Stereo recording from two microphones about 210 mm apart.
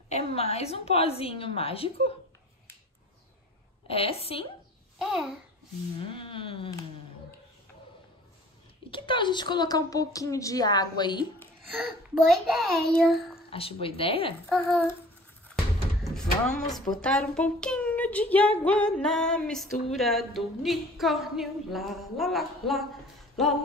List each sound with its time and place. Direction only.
0.1 s a woman's voice: 30° left (ahead or behind)
3.8 s a woman's voice: 25° left (ahead or behind)
4.9 s a child's voice: centre (ahead or behind)
6.1 s a sound: 25° left (ahead or behind)
8.9 s a woman's voice: 25° left (ahead or behind)
11.8 s female singing: centre (ahead or behind)
13.5 s a woman's voice: 25° left (ahead or behind)
14.5 s female singing: centre (ahead or behind)
16.0 s a sound: 5° left (ahead or behind)
17.0 s female singing: 5° left (ahead or behind)